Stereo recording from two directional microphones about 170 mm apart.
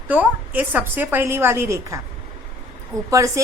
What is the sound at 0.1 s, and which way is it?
A woman's voice, 10° right (ahead or behind).